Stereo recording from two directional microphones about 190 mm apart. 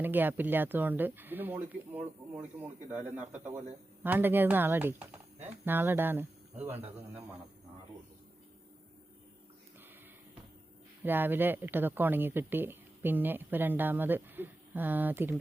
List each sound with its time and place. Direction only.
0.0 s speech: 10° right (ahead or behind)
11.0 s speech: 10° right (ahead or behind)